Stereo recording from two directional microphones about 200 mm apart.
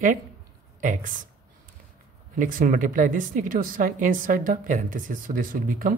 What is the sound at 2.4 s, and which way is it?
A woman's voice, 45° right (ahead or behind).